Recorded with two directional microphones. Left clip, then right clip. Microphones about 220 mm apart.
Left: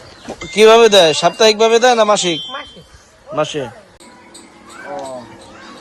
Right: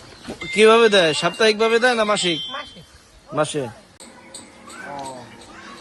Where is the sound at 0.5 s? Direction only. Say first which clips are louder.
Left 6 dB; centre (ahead or behind).